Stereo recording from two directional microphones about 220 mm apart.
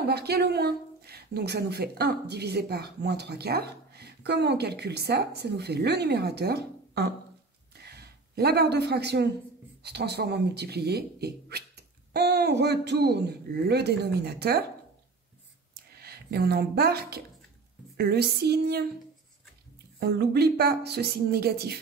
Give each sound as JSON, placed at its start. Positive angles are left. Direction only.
{"t": 0.0, "sound": "speech", "side_deg": -45}
{"t": 7.7, "sound": "a sound", "side_deg": -45}
{"t": 9.8, "sound": "speech", "side_deg": -50}
{"t": 15.7, "sound": "a sound", "side_deg": -45}
{"t": 17.9, "sound": "speech", "side_deg": -45}
{"t": 20.0, "sound": "speech", "side_deg": -50}